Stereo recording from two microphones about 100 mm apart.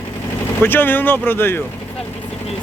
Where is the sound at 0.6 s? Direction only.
20° left (ahead or behind).